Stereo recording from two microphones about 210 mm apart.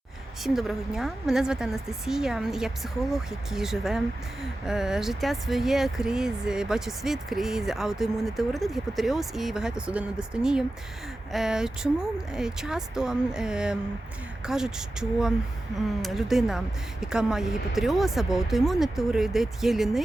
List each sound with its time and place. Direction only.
0.4 s speech: centre (ahead or behind)